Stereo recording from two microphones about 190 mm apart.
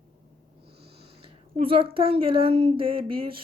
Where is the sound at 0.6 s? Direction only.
30° right (ahead or behind).